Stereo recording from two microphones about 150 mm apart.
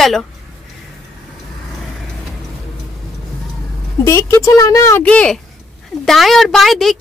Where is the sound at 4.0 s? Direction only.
20° left (ahead or behind).